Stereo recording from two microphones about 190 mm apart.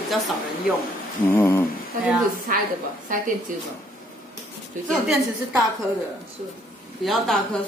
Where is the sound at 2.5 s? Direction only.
50° right (ahead or behind).